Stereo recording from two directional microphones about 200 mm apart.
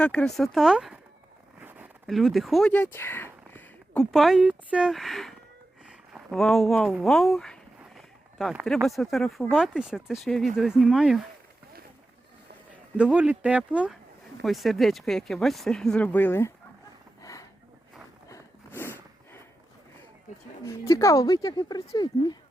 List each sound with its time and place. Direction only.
0.0 s speech: 5° left (ahead or behind)
1.5 s a sound: 10° right (ahead or behind); by 4.0 s 10° left (ahead or behind)
4.1 s speech: centre (ahead or behind)
13.0 s speech: 5° right (ahead or behind); by 16.5 s 10° left (ahead or behind)
18.3 s a sound: 15° left (ahead or behind)
20.7 s speech: 15° left (ahead or behind)